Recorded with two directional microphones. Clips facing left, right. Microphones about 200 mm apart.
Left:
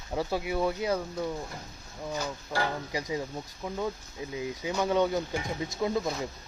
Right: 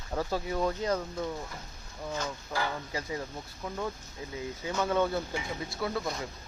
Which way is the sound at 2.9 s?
15° left (ahead or behind).